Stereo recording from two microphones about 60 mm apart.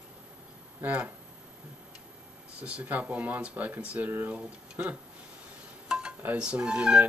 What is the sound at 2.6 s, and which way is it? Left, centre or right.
Speech, right.